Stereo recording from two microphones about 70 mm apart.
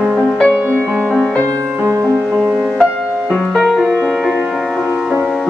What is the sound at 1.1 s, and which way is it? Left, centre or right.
Music, centre.